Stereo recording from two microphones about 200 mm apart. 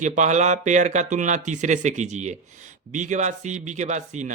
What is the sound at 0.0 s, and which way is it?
Speech, 35° right (ahead or behind).